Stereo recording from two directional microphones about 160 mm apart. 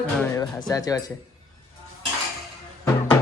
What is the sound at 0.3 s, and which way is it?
Speech, 20° left (ahead or behind).